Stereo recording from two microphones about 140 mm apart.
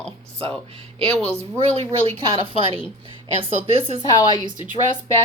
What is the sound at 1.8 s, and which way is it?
A woman's voice, 40° right (ahead or behind).